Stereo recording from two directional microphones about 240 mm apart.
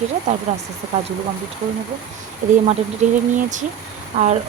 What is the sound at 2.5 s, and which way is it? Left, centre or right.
Speech, right.